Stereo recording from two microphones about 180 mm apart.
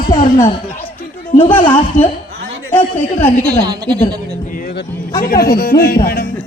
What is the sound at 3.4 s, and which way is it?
Speech, 55° right (ahead or behind).